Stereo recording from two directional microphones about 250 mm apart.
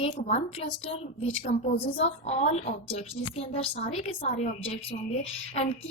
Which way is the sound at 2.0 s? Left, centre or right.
Left.